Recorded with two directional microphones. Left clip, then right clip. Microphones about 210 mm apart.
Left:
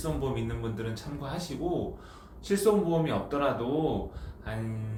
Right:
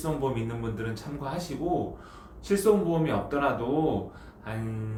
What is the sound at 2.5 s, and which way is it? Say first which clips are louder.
Speech: right 2 dB; 5° right (ahead or behind).